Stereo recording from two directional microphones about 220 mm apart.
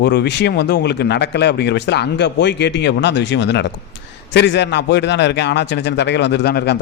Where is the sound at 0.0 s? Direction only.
50° left (ahead or behind).